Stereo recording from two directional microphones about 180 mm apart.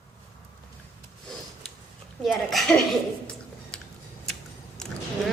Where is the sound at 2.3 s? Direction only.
Centre (ahead or behind).